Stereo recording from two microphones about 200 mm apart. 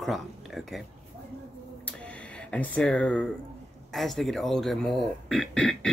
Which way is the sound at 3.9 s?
Centre (ahead or behind).